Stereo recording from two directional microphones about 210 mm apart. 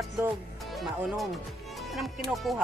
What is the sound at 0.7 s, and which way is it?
Speech, centre (ahead or behind).